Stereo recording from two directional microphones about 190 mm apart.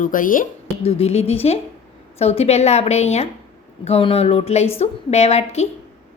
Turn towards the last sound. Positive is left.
turn(degrees=35)  # may be behind; listen again after turning